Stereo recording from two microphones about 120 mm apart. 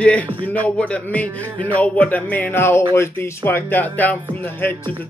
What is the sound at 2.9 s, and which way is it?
Speech, 20° left (ahead or behind).